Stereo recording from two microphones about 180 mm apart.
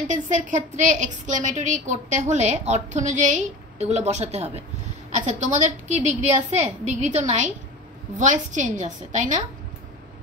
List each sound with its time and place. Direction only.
0.1 s a woman's voice: 45° right (ahead or behind)